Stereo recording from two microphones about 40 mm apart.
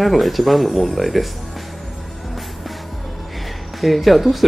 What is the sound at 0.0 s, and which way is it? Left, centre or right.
Speech, centre.